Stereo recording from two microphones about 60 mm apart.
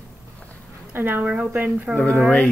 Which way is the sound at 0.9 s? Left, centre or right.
Right.